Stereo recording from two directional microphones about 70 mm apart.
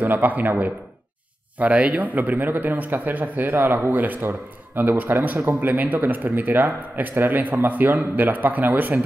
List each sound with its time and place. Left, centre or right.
0.0 s speech: right